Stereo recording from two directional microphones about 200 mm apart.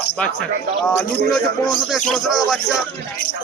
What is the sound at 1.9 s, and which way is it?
Speech, centre (ahead or behind).